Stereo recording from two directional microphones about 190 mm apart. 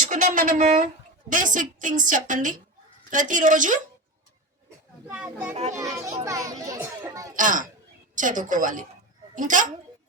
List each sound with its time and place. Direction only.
0.0 s a woman's voice: 40° right (ahead or behind)
5.0 s a child's voice: 10° right (ahead or behind)
7.3 s a woman's voice: 45° right (ahead or behind)